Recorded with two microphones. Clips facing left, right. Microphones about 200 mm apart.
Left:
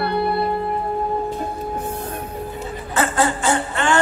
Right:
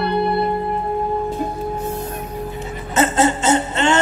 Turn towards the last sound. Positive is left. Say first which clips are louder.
# right 3 dB
turn(degrees=-20)  # may be behind; listen again after turning